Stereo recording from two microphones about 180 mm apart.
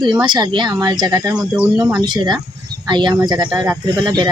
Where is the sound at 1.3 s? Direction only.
5° right (ahead or behind).